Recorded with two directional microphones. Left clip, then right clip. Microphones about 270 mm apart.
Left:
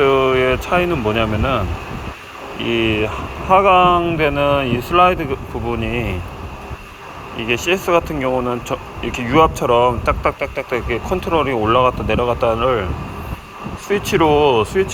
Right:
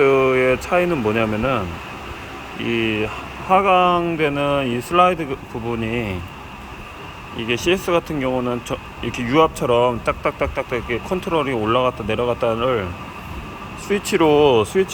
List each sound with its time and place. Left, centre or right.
0.0 s speech: centre
7.3 s speech: centre